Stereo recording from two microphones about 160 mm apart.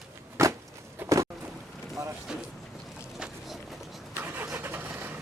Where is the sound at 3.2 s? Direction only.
Centre (ahead or behind).